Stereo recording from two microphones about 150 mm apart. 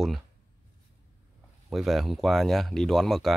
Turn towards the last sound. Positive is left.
turn(degrees=0)  # may be behind; listen again after turning